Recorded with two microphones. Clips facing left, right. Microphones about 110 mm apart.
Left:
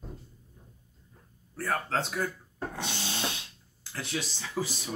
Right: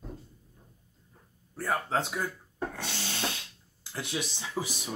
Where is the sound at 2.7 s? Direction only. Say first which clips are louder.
Left 2 dB; 20° left (ahead or behind).